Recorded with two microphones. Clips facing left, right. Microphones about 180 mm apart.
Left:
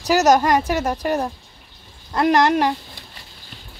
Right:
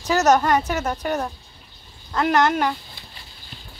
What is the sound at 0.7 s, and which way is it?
Speech, 30° left (ahead or behind).